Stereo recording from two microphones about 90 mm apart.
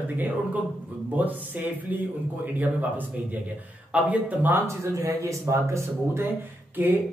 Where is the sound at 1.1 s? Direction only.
20° right (ahead or behind).